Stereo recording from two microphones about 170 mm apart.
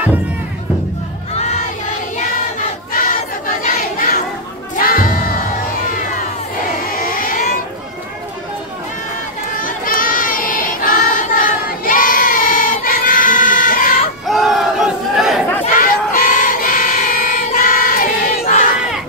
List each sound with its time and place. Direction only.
2.9 s crowd: 55° left (ahead or behind)
4.7 s music: 55° left (ahead or behind)
6.8 s vehicle: 55° left (ahead or behind)
9.6 s child singing: 55° left (ahead or behind)
14.2 s battle cry: centre (ahead or behind)
15.6 s choir: 50° left (ahead or behind)